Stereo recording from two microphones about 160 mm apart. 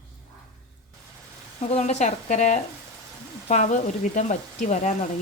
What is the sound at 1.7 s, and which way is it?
Speech, 45° left (ahead or behind).